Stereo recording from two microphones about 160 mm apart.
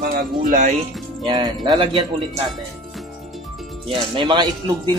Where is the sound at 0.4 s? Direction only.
50° right (ahead or behind).